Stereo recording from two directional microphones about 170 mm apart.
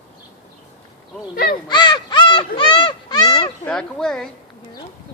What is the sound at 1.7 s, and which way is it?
Crow, 25° left (ahead or behind).